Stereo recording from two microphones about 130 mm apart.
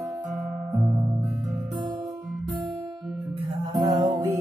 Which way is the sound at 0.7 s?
45° right (ahead or behind).